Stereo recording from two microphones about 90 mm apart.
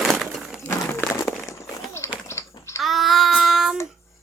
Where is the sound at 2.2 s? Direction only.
30° left (ahead or behind).